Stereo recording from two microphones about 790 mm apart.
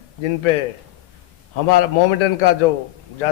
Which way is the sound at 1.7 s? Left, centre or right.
Left.